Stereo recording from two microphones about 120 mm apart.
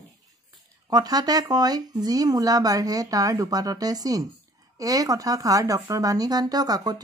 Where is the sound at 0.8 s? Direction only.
35° right (ahead or behind).